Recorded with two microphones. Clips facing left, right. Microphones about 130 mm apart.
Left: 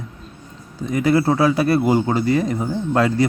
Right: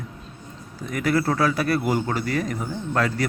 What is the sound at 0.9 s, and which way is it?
A man's voice, 25° left (ahead or behind).